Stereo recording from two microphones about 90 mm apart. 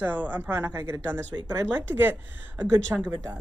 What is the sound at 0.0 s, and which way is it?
Speech, 20° right (ahead or behind).